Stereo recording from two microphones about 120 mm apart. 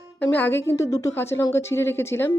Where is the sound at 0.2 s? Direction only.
15° left (ahead or behind).